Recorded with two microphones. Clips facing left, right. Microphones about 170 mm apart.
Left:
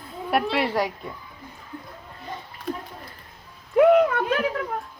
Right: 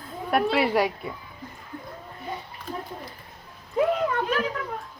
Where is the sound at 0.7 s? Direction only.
10° right (ahead or behind).